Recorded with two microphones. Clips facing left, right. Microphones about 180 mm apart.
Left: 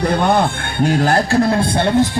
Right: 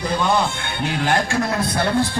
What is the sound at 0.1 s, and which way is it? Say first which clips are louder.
A man's voice: left 5 dB; 55° left (ahead or behind).